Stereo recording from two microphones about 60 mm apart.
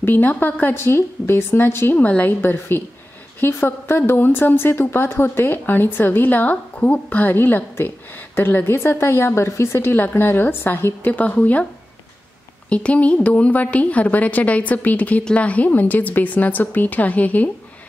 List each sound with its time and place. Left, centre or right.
0.0 s a woman's voice: left
0.7 s speech: left
2.0 s a woman's voice: left
9.8 s a woman's voice: left
11.1 s a woman's voice: left
12.6 s a woman's voice: left